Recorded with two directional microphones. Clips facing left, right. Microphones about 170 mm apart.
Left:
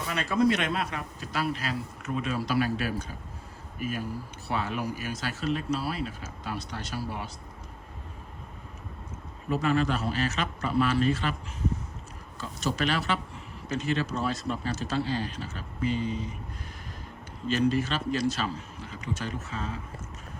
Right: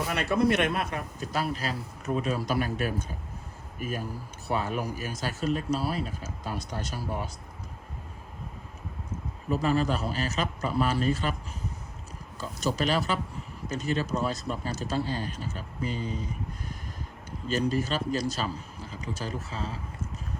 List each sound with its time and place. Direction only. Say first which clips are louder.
0.1 s a man's voice: left 1 dB; 60° right (ahead or behind); by 7.3 s 45° right (ahead or behind)
9.5 s speech: even; 35° right (ahead or behind)
12.4 s speech: right 1 dB; 40° right (ahead or behind)
17.5 s speech: left 1 dB; 40° right (ahead or behind)